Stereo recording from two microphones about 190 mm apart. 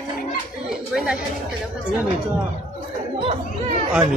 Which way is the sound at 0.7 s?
5° right (ahead or behind).